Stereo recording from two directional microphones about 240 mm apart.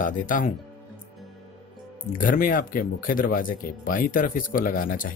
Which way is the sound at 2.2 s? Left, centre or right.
Left.